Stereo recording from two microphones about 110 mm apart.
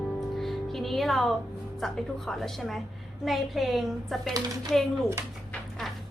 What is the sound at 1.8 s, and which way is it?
A woman's voice, centre (ahead or behind).